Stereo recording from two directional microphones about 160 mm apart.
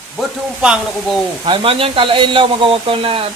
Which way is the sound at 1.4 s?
35° right (ahead or behind).